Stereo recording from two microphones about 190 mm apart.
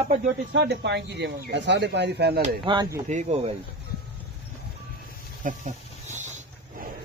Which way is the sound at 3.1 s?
35° right (ahead or behind).